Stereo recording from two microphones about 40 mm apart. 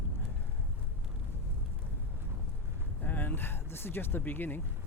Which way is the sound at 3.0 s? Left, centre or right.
Left.